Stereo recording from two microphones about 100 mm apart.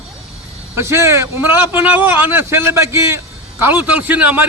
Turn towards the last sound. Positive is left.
turn(degrees=-15)  # may be behind; listen again after turning